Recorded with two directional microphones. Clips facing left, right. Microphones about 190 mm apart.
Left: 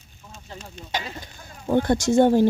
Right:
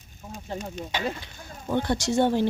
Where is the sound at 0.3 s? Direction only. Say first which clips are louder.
Right 7 dB; 50° right (ahead or behind).